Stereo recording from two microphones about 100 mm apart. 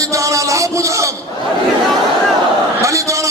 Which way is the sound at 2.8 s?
30° right (ahead or behind).